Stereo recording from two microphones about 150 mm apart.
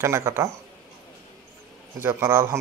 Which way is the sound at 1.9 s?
15° right (ahead or behind).